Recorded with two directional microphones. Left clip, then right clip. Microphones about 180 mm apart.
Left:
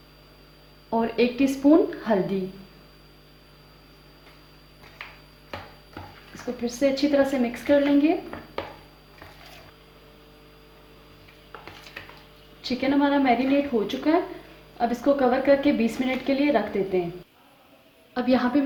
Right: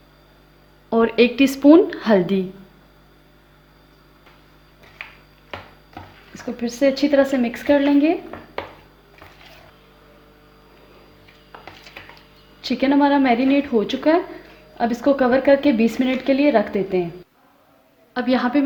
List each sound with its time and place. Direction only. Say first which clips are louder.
0.9 s a woman's voice: right 7 dB; 60° right (ahead or behind)
6.0 s music: right 3 dB; centre (ahead or behind)
6.3 s speech: right 3 dB; 50° right (ahead or behind)
12.6 s speech: right 6 dB; 50° right (ahead or behind)
18.1 s a woman's voice: right 3 dB; 20° right (ahead or behind)